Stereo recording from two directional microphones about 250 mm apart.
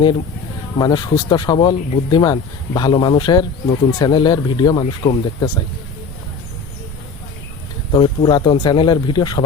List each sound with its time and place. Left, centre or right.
0.8 s speech: centre
7.9 s speech: centre